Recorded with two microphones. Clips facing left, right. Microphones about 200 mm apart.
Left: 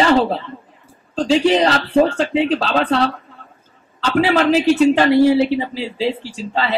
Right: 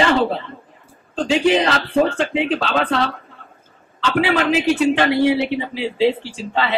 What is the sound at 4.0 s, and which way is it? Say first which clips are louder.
A woman's voice: left 2 dB; 35° left (ahead or behind).